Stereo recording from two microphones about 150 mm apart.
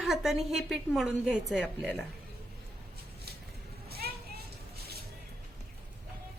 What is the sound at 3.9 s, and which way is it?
Vehicle, 90° right.